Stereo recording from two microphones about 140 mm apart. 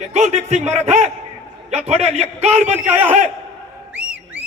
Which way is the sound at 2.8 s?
10° right (ahead or behind).